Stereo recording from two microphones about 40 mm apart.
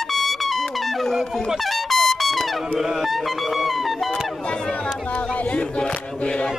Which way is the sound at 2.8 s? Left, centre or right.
Centre.